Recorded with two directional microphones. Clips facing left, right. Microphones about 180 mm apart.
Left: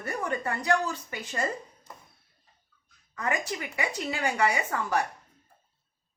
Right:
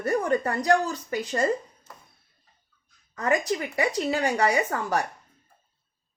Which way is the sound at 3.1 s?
40° right (ahead or behind).